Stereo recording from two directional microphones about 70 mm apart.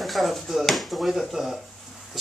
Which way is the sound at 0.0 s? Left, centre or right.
Centre.